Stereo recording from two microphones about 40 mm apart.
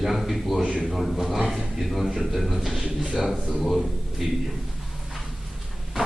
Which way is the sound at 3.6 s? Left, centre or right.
Centre.